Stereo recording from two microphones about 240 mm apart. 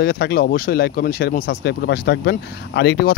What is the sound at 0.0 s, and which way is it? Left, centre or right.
Speech, left.